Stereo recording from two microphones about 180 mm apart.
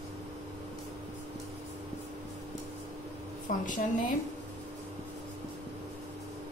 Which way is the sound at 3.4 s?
45° left (ahead or behind).